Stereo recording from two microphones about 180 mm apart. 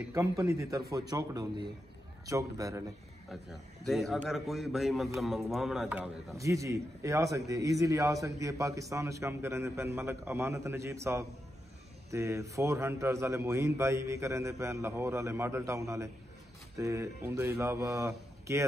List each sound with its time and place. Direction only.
0.1 s a man's voice: 15° right (ahead or behind)
3.3 s a man's voice: centre (ahead or behind)
6.3 s a man's voice: 15° right (ahead or behind)